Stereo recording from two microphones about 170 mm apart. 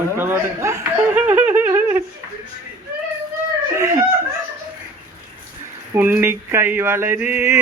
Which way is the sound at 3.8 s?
20° right (ahead or behind).